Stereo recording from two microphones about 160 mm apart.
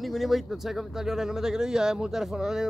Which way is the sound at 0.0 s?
Centre (ahead or behind).